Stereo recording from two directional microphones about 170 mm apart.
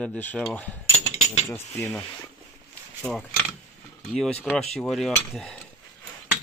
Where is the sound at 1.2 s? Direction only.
40° left (ahead or behind).